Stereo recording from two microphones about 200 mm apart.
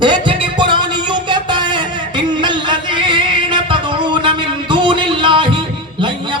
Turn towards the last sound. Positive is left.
turn(degrees=-25)  # may be behind; listen again after turning